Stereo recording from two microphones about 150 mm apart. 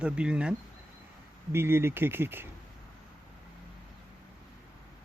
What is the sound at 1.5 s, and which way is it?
Speech, 15° right (ahead or behind).